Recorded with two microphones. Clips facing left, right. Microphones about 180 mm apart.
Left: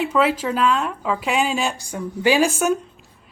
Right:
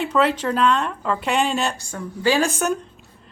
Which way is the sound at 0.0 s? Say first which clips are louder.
Even; 5° left (ahead or behind).